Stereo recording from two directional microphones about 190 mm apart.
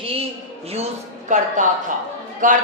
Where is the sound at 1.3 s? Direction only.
40° right (ahead or behind).